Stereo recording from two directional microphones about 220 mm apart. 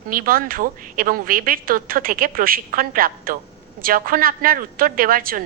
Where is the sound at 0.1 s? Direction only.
40° right (ahead or behind).